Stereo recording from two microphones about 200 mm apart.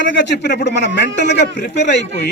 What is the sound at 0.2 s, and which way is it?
A man's voice, 60° left (ahead or behind).